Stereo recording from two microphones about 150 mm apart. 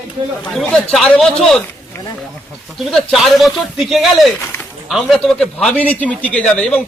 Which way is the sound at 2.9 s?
Centre (ahead or behind).